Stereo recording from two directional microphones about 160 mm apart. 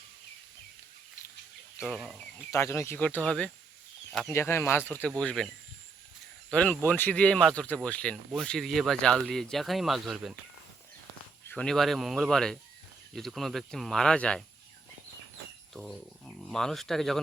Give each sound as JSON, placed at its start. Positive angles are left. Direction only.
{"t": 1.9, "sound": "speech", "side_deg": 0}
{"t": 2.5, "sound": "speech", "side_deg": 20}
{"t": 6.5, "sound": "speech", "side_deg": 10}
{"t": 11.4, "sound": "speech", "side_deg": 5}
{"t": 15.7, "sound": "speech", "side_deg": 0}